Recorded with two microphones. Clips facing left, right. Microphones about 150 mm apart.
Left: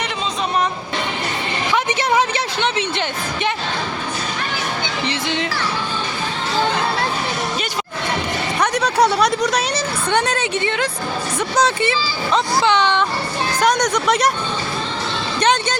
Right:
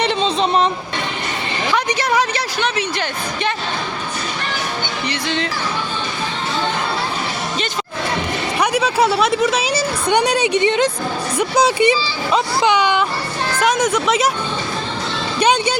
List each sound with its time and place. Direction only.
0.0 s vehicle: 25° right (ahead or behind)
1.7 s speech: 20° left (ahead or behind)
5.0 s speech: 15° left (ahead or behind)
8.6 s a woman's voice: 5° right (ahead or behind)
15.4 s speech: 10° right (ahead or behind)